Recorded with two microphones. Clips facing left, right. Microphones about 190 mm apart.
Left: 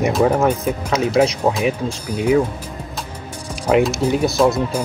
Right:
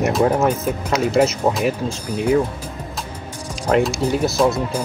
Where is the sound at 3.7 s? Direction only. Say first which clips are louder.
Left 2 dB; 5° left (ahead or behind).